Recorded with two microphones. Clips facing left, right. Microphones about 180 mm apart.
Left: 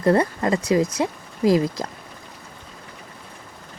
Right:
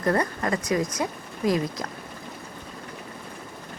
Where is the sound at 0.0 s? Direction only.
25° left (ahead or behind).